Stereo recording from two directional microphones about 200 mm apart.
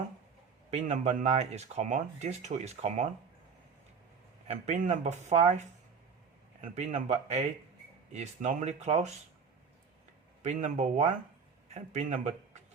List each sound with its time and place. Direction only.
0.7 s speech: 35° right (ahead or behind)
4.4 s speech: 35° right (ahead or behind)
10.4 s speech: 35° right (ahead or behind)